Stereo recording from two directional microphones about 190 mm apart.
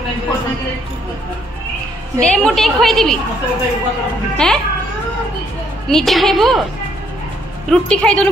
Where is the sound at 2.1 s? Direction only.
5° left (ahead or behind).